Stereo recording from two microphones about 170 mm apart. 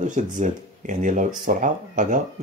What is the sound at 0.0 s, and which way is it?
Speech, 45° right (ahead or behind).